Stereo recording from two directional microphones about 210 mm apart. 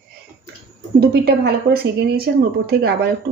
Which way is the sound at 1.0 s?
50° right (ahead or behind).